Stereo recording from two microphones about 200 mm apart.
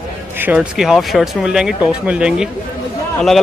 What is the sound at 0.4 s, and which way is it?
Speech, 5° right (ahead or behind).